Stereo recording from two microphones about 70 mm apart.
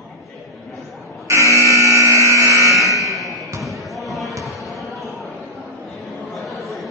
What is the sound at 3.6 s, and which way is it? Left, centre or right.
Basketball bounce, centre.